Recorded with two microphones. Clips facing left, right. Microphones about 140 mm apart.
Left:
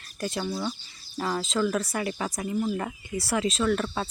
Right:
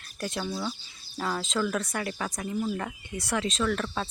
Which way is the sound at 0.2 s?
Centre (ahead or behind).